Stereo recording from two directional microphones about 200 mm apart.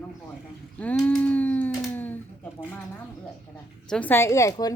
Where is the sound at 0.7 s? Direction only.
5° left (ahead or behind).